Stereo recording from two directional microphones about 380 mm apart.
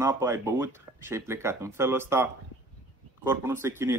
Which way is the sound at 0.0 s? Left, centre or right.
Centre.